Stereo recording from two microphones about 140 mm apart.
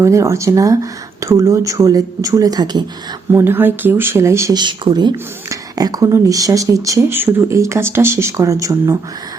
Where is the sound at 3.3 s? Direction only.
15° right (ahead or behind).